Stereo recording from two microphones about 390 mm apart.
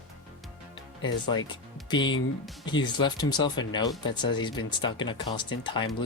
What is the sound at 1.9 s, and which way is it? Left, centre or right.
Speech, centre.